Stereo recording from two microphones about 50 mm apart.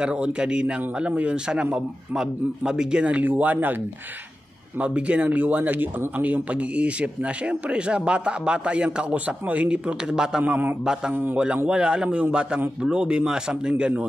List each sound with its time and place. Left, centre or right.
0.0 s a man's voice: right
3.1 s speech: right
4.7 s speech: right
10.4 s speech: right
11.7 s a man's voice: centre